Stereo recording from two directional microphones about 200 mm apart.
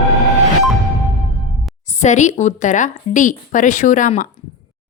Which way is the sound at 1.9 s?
35° left (ahead or behind).